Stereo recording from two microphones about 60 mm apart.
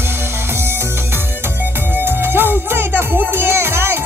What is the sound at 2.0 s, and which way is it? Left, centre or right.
Music, right.